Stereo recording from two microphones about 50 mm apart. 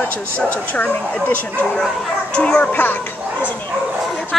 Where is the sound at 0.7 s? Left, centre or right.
Left.